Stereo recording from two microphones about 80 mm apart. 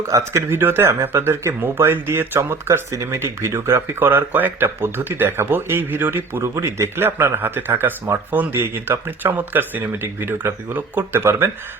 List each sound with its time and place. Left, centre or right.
0.1 s speech: right